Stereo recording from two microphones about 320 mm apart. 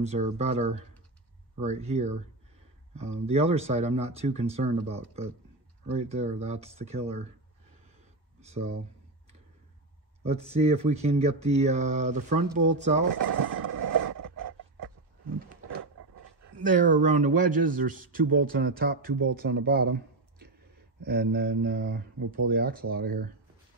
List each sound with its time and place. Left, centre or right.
0.0 s speech: right
8.4 s speech: centre
10.2 s speech: centre
13.2 s a sound: right
16.6 s speech: right